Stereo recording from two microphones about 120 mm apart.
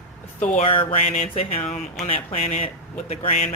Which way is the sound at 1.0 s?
70° left (ahead or behind).